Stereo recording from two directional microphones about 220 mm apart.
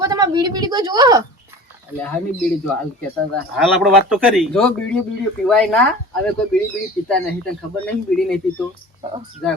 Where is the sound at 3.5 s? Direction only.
Centre (ahead or behind).